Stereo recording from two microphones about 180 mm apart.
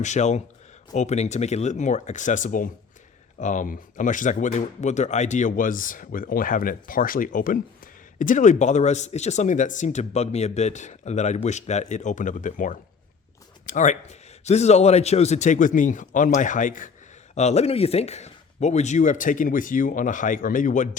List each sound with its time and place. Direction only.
0.0 s speech: 40° left (ahead or behind)